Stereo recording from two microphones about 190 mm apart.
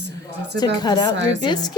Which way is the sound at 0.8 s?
20° left (ahead or behind).